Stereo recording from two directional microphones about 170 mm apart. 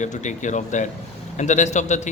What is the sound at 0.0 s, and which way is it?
A man's voice, 45° left (ahead or behind).